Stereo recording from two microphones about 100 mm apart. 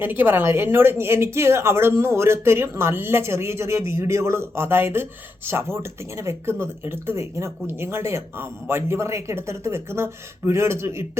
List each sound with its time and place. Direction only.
0.0 s speech: 20° right (ahead or behind)